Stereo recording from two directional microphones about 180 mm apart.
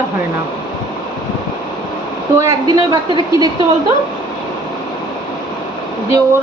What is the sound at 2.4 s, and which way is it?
A woman's voice, 20° right (ahead or behind).